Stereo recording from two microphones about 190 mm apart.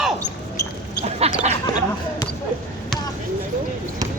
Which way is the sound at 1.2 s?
30° right (ahead or behind).